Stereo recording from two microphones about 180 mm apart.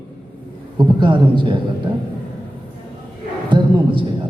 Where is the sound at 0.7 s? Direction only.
25° right (ahead or behind).